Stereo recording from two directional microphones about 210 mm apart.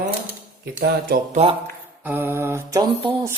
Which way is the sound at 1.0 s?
40° right (ahead or behind).